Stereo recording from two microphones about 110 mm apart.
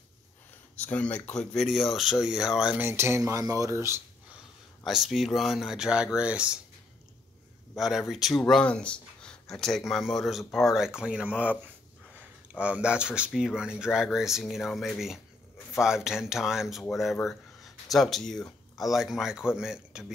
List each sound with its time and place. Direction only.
0.7 s speech: 15° left (ahead or behind); by 2.8 s 5° right (ahead or behind)
2.8 s speech: 20° right (ahead or behind)
4.8 s speech: centre (ahead or behind)
7.7 s speech: 5° right (ahead or behind)